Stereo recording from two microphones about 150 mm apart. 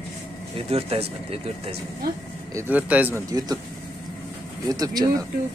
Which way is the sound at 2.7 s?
10° right (ahead or behind).